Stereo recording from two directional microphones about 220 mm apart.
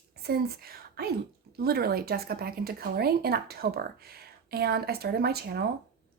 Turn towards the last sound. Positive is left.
turn(degrees=-45)  # may be behind; listen again after turning